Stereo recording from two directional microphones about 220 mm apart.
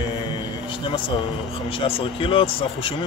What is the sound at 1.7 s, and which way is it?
Speech, 25° left (ahead or behind).